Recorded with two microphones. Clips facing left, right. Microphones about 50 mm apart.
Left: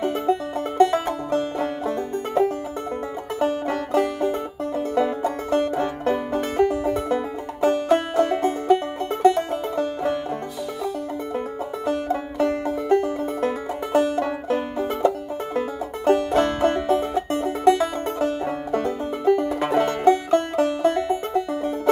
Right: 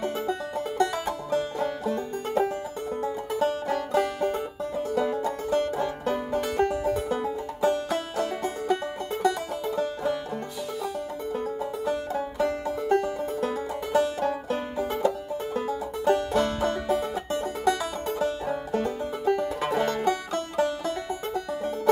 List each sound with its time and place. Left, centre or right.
0.0 s music: left
11.8 s music: left